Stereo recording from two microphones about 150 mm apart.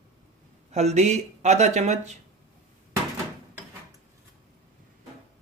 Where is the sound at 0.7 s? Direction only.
50° right (ahead or behind).